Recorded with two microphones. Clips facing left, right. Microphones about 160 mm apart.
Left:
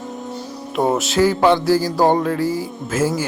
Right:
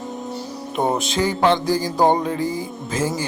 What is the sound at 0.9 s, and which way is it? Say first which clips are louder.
Speech: left 5 dB; 5° left (ahead or behind).